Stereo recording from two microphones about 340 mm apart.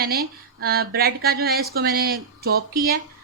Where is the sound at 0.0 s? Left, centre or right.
Right.